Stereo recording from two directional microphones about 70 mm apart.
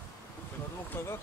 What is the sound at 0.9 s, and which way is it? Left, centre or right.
Speech, left.